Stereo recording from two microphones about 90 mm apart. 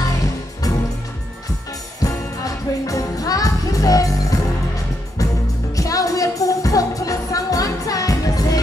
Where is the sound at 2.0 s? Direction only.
40° left (ahead or behind).